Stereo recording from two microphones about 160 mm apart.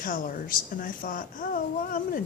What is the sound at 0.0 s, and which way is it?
A child's voice, 55° left (ahead or behind).